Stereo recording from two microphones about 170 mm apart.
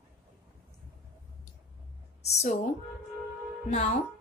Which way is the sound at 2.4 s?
40° left (ahead or behind).